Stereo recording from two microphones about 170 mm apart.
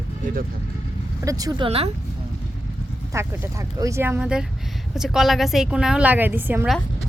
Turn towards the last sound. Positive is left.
turn(degrees=-10)  # may be behind; listen again after turning